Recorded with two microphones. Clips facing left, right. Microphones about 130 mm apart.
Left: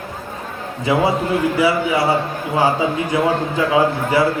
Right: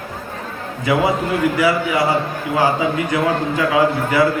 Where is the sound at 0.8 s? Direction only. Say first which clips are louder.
Even; 25° left (ahead or behind).